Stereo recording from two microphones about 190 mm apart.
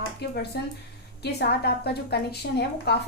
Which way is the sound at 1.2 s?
60° left (ahead or behind).